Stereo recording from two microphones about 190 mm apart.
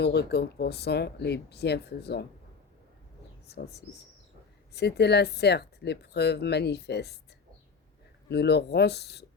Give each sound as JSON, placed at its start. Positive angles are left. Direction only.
{"t": 0.0, "sound": "speech", "side_deg": 60}
{"t": 3.4, "sound": "speech", "side_deg": 60}
{"t": 8.3, "sound": "speech", "side_deg": 60}